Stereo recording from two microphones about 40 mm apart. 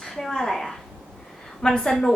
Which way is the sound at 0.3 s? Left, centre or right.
Centre.